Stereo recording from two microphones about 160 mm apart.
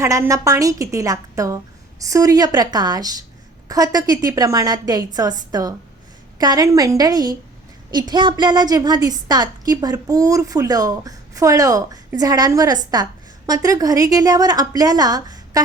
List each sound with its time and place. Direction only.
0.0 s a woman's voice: 20° right (ahead or behind)